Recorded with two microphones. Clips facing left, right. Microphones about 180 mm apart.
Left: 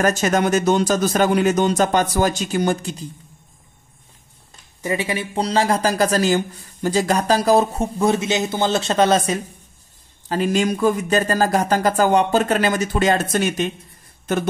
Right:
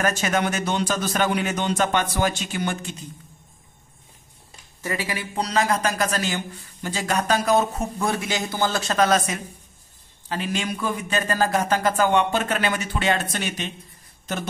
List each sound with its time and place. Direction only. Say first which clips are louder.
0.0 s speech: left 5 dB; 40° left (ahead or behind)
4.8 s speech: left 6 dB; 25° left (ahead or behind)
10.2 s speech: left 8 dB; 40° left (ahead or behind)